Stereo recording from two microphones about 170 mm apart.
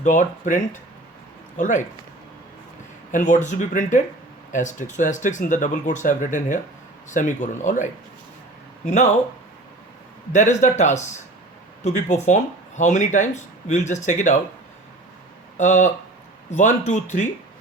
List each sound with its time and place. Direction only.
0.0 s speech: 45° left (ahead or behind)
3.1 s speech: 45° left (ahead or behind)
10.3 s speech: 45° left (ahead or behind)
15.5 s speech: 45° left (ahead or behind)